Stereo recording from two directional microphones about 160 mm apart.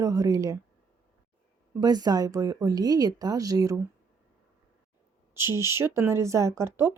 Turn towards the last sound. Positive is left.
turn(degrees=-15)  # may be behind; listen again after turning